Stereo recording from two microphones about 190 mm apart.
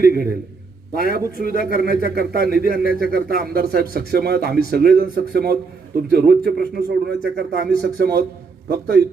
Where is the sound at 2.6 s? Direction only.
50° right (ahead or behind).